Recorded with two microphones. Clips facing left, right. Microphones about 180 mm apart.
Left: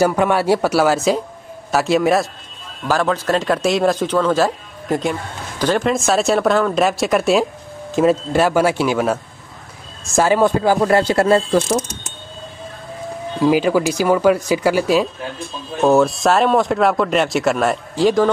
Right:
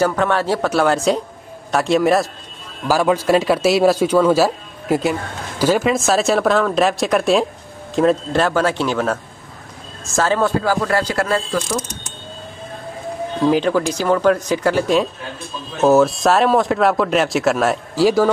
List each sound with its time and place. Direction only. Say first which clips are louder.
0.0 s a man's voice: left 2 dB; 10° left (ahead or behind)
13.4 s speech: left 1 dB; 10° left (ahead or behind)